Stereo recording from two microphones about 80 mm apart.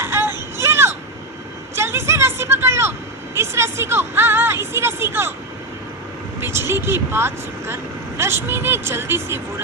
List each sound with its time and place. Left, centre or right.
0.0 s a sound: right
3.3 s speech: right
6.4 s speech: right